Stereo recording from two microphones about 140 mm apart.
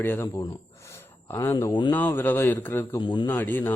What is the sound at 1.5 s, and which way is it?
Speech, 35° left (ahead or behind).